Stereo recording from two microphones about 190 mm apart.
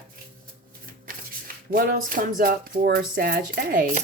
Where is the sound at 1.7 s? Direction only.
50° right (ahead or behind).